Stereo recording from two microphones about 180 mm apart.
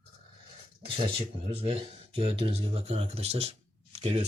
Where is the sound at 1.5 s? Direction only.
30° right (ahead or behind).